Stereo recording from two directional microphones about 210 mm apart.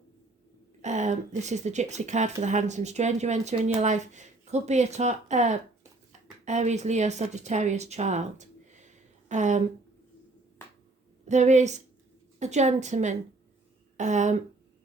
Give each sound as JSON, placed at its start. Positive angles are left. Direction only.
{"t": 0.8, "sound": "speech", "side_deg": -35}
{"t": 11.3, "sound": "speech", "side_deg": -35}